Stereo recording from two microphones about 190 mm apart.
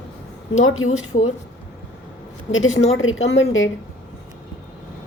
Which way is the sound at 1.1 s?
40° left (ahead or behind).